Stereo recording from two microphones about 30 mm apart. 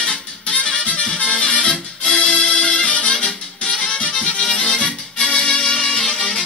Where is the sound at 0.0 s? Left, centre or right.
Left.